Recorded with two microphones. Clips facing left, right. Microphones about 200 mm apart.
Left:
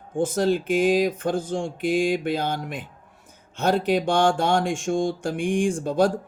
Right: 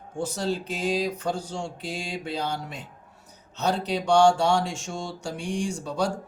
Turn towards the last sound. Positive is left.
turn(degrees=50)  # may be behind; listen again after turning